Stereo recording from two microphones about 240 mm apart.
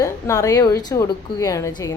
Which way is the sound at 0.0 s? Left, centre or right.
Centre.